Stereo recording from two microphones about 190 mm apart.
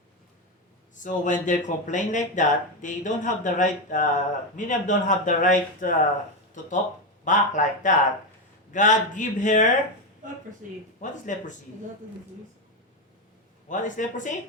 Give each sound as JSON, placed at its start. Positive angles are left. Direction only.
{"t": 1.0, "sound": "speech", "side_deg": 40}
{"t": 7.3, "sound": "speech", "side_deg": 40}
{"t": 11.0, "sound": "speech", "side_deg": 40}
{"t": 13.7, "sound": "speech", "side_deg": 40}